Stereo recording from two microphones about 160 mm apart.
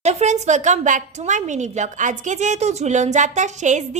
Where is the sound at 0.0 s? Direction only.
45° right (ahead or behind).